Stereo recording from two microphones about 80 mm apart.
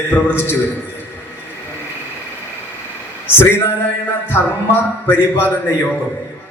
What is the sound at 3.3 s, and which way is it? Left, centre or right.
A man's voice, left.